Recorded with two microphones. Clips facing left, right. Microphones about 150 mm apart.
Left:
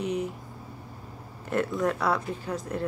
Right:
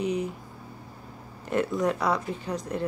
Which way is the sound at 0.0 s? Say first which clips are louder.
Right 1 dB; centre (ahead or behind).